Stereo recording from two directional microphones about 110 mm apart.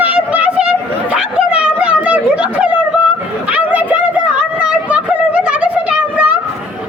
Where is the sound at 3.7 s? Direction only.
15° right (ahead or behind).